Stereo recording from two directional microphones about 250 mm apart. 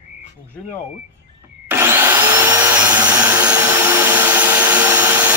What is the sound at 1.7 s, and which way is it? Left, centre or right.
Vacuum cleaner, centre.